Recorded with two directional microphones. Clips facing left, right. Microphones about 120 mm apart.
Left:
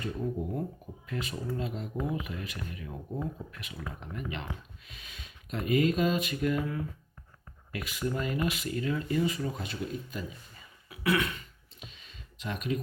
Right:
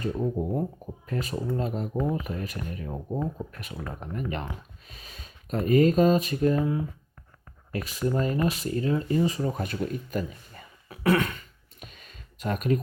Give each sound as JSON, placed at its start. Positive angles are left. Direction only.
{"t": 0.0, "sound": "speech", "side_deg": -40}
{"t": 2.0, "sound": "speech", "side_deg": 5}
{"t": 2.2, "sound": "speech", "side_deg": -40}
{"t": 9.6, "sound": "beatboxing", "side_deg": -50}